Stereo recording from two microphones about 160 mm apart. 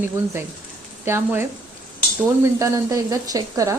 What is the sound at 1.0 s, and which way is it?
A woman's voice, 15° right (ahead or behind).